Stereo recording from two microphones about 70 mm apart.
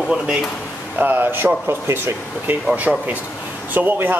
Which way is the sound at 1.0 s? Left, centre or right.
Right.